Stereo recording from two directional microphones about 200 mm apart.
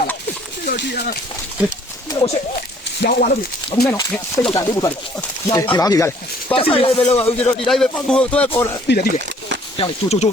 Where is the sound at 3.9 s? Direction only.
10° left (ahead or behind).